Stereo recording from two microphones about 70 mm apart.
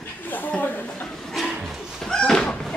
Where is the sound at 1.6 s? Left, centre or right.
Centre.